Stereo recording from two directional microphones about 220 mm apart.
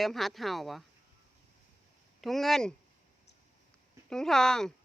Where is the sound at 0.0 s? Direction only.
Centre (ahead or behind).